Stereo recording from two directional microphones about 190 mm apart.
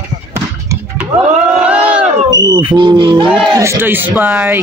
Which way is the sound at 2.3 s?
20° right (ahead or behind).